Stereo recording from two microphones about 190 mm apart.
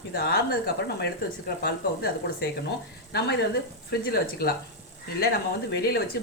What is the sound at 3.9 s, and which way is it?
Speech, 55° left (ahead or behind).